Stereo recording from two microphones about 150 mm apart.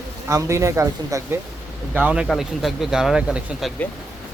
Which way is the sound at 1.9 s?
10° right (ahead or behind).